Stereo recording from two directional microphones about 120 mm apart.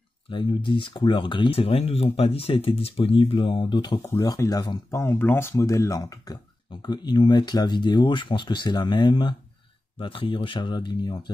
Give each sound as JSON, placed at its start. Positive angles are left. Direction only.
{"t": 0.3, "sound": "speech", "side_deg": 45}
{"t": 4.0, "sound": "speech", "side_deg": 30}
{"t": 5.0, "sound": "speech", "side_deg": 20}